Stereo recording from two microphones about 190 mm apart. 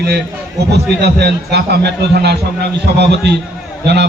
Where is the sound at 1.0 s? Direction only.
60° right (ahead or behind).